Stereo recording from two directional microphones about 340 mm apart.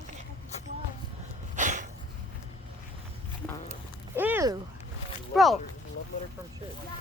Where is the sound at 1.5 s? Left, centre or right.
Right.